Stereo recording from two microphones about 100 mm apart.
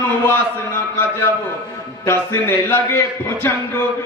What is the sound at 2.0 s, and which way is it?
Speech, 25° left (ahead or behind).